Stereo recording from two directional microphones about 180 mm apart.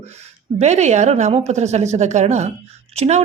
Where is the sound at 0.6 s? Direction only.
40° right (ahead or behind).